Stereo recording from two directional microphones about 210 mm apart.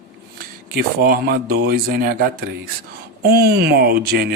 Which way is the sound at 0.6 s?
45° right (ahead or behind).